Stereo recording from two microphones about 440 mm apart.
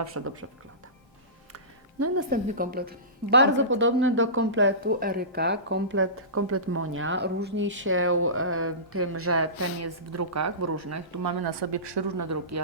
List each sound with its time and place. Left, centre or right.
0.1 s speech: right
1.5 s music: right
2.3 s a woman's voice: centre; by 12.0 s right
12.1 s speech: right